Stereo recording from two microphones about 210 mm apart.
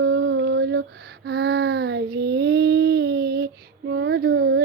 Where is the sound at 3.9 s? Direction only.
55° right (ahead or behind).